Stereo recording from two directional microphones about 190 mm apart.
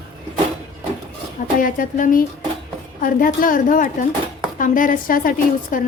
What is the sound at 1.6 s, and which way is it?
A woman's voice, 45° left (ahead or behind).